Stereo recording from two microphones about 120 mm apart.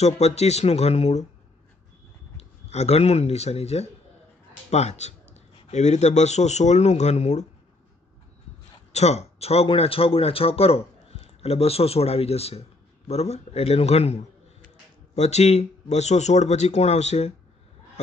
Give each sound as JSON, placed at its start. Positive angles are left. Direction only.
{"t": 0.0, "sound": "speech", "side_deg": 65}
{"t": 2.3, "sound": "speech", "side_deg": 65}
{"t": 8.9, "sound": "speech", "side_deg": 65}